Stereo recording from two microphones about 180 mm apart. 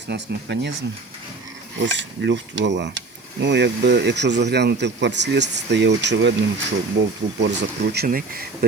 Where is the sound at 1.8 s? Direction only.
90° right.